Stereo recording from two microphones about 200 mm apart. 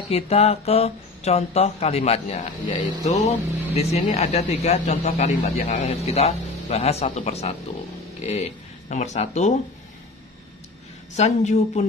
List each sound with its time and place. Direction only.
0.1 s speech: 30° left (ahead or behind)
11.1 s speech: 35° left (ahead or behind)